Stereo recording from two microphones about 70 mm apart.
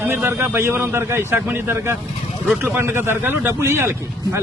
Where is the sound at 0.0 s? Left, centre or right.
Right.